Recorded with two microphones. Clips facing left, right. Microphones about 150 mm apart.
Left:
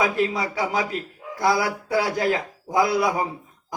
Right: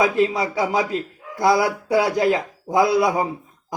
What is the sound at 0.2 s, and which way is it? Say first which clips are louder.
A man's voice: right 4 dB; 25° right (ahead or behind).